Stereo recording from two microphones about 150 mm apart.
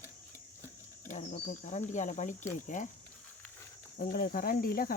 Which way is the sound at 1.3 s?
65° left (ahead or behind).